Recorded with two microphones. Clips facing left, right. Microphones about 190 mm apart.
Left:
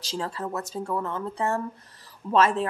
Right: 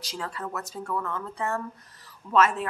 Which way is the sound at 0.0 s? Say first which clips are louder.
Left 4 dB; 30° left (ahead or behind).